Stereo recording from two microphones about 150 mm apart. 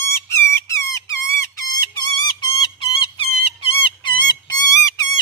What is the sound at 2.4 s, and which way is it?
Music, 35° left (ahead or behind).